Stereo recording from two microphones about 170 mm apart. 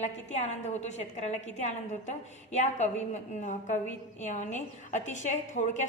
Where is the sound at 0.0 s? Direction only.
40° left (ahead or behind).